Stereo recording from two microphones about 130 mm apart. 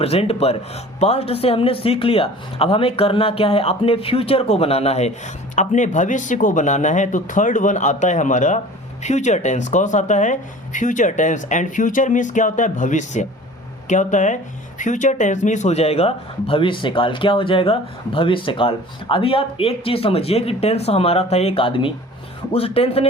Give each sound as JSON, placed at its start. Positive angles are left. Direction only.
{"t": 0.0, "sound": "speech", "side_deg": 50}
{"t": 5.5, "sound": "speech", "side_deg": 70}